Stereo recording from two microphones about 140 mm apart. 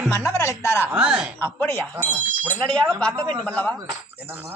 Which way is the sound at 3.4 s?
10° left (ahead or behind).